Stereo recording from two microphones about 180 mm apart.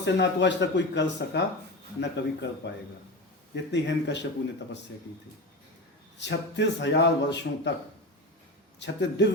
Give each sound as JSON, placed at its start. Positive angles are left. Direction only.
{"t": 0.0, "sound": "a man's voice", "side_deg": 75}
{"t": 6.1, "sound": "a man's voice", "side_deg": 75}
{"t": 8.8, "sound": "a man's voice", "side_deg": 75}